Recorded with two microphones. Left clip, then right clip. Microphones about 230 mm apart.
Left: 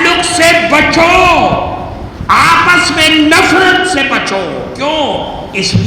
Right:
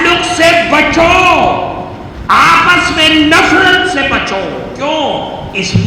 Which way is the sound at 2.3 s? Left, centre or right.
Left.